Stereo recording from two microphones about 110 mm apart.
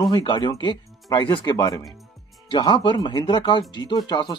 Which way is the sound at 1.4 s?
35° left (ahead or behind).